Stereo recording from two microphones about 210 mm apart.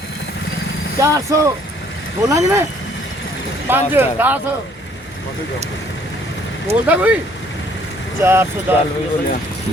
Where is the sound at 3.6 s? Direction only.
10° right (ahead or behind).